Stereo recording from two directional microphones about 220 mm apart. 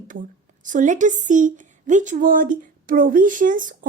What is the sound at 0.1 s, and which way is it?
A woman's voice, 35° right (ahead or behind).